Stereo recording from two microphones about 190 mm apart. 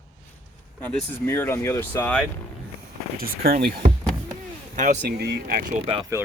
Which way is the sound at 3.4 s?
50° right (ahead or behind).